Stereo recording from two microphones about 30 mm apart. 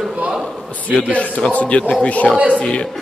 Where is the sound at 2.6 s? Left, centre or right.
Left.